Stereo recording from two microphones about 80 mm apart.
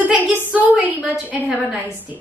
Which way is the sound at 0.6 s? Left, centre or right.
Centre.